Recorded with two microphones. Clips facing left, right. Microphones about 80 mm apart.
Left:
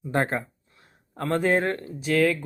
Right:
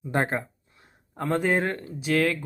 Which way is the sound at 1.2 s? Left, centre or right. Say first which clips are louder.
Left 1 dB; centre.